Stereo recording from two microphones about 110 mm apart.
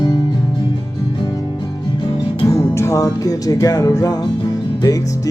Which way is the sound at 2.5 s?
25° left (ahead or behind).